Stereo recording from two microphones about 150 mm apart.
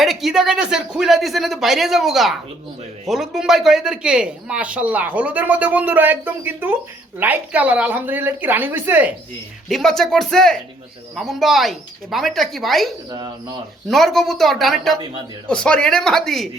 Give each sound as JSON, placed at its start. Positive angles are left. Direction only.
{"t": 0.0, "sound": "speech", "side_deg": 0}
{"t": 9.6, "sound": "speech", "side_deg": 0}
{"t": 13.1, "sound": "speech", "side_deg": -30}
{"t": 13.8, "sound": "speech", "side_deg": 0}